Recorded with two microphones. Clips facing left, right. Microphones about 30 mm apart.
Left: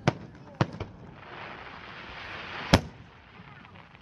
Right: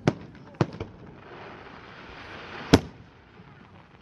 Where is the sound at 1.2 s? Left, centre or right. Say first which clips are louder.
Left 2 dB; left.